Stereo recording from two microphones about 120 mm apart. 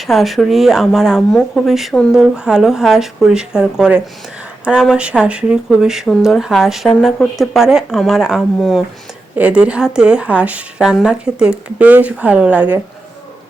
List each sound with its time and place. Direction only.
0.0 s a woman's voice: centre (ahead or behind)